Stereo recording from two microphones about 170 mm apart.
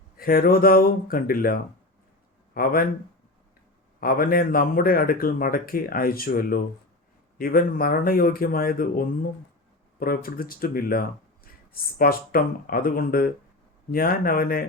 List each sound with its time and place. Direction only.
0.2 s speech: 60° left (ahead or behind)
2.5 s speech: 60° left (ahead or behind)
4.0 s speech: 60° left (ahead or behind)